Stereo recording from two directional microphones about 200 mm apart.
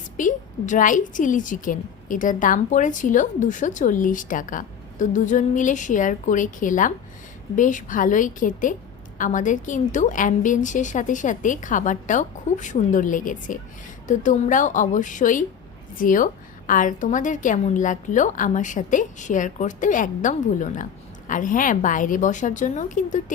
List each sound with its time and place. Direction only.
0.2 s a woman's voice: 40° left (ahead or behind)